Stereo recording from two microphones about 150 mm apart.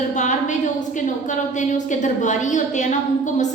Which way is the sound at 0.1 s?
55° left (ahead or behind).